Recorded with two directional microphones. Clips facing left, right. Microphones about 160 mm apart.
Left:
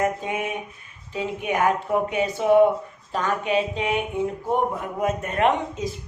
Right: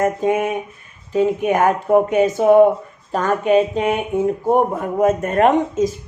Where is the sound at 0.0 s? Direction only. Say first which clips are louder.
Right 7 dB; 45° right (ahead or behind).